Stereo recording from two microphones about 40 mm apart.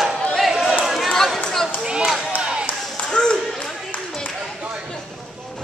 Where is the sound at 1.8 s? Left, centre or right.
Right.